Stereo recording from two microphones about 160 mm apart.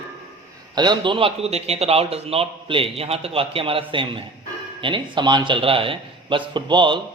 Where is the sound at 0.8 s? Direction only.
30° right (ahead or behind).